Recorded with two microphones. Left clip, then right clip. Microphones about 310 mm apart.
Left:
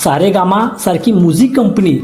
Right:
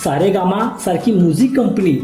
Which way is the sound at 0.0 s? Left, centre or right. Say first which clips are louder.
Left 4 dB; centre.